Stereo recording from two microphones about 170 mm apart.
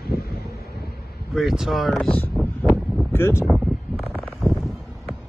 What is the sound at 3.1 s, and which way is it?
Speech, 15° left (ahead or behind).